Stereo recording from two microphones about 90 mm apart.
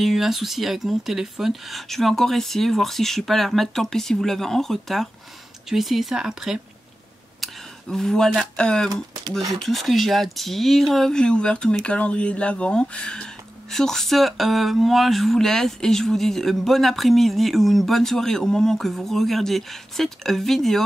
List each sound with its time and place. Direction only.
0.0 s speech: centre (ahead or behind)